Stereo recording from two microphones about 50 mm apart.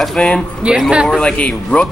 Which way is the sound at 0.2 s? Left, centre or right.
Left.